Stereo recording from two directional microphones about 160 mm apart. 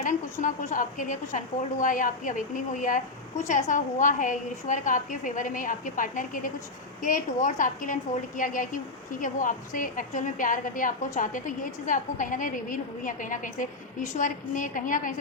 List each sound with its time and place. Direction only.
0.0 s a woman's voice: 55° left (ahead or behind)